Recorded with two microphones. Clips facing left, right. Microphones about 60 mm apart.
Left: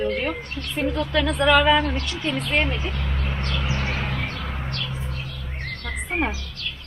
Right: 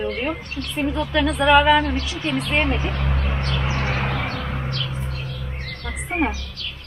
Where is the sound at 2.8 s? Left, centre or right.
Right.